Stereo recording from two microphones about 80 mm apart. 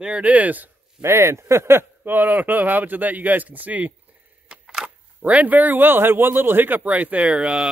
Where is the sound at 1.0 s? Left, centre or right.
Right.